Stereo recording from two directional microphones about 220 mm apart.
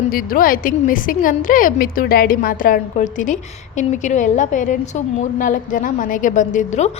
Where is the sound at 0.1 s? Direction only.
40° left (ahead or behind).